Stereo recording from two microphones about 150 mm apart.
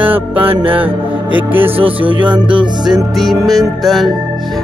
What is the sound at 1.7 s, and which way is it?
Music, 40° right (ahead or behind).